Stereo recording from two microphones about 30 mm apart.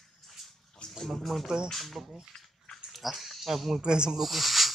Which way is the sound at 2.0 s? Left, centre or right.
Centre.